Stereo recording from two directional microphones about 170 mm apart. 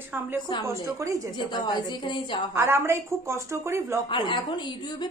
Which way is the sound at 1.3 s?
25° left (ahead or behind).